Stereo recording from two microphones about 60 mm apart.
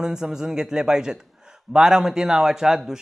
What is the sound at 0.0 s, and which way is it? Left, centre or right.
Speech, centre.